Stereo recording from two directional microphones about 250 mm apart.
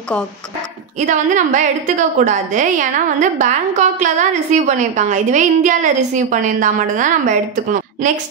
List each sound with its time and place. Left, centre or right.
0.9 s a woman's voice: right